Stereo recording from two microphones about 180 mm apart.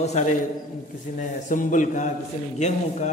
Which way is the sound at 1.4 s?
45° left (ahead or behind).